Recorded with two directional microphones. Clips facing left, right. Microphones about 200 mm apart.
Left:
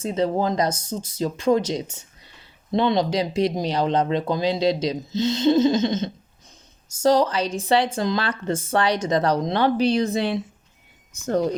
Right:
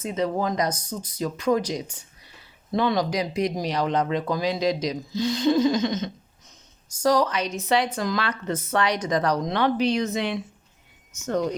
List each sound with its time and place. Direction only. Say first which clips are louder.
0.0 s speech: left 3 dB; 30° left (ahead or behind)